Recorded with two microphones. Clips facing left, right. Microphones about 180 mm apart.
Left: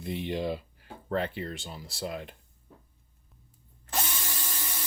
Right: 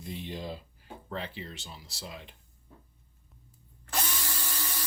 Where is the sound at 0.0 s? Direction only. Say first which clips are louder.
Left 7 dB; 65° left (ahead or behind).